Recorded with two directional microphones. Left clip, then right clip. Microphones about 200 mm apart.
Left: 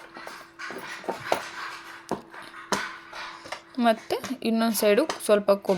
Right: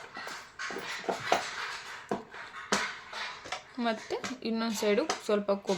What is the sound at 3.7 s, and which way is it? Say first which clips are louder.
Speech: left 10 dB; 40° left (ahead or behind).